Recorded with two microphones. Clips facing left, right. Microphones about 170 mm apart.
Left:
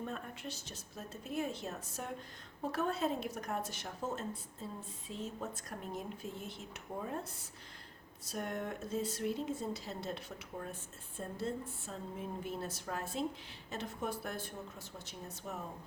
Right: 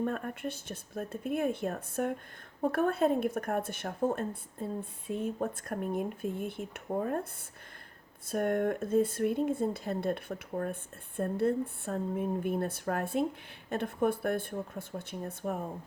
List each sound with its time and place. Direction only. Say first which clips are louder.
0.0 s a woman's voice: right 9 dB; 55° right (ahead or behind)
8.3 s a woman's voice: right 11 dB; 55° right (ahead or behind)